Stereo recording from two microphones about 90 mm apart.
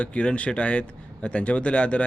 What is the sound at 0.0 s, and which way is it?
Speech, 15° left (ahead or behind).